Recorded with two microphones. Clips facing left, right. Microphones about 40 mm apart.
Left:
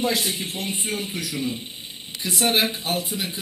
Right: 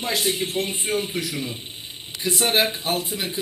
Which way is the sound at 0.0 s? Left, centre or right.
Right.